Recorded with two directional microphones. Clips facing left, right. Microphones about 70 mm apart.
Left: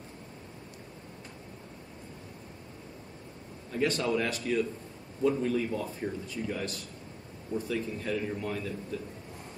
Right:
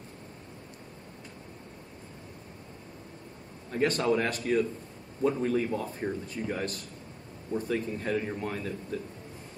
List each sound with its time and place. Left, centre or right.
3.7 s a man's voice: right